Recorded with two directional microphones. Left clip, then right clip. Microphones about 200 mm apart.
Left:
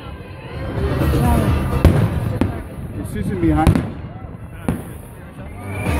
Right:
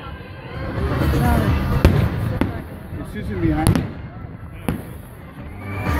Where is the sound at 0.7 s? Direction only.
20° left (ahead or behind).